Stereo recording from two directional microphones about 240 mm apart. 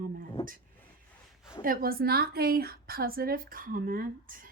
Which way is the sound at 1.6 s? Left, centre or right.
Right.